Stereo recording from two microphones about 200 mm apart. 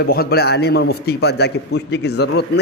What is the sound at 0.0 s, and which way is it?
A man's voice, 50° left (ahead or behind).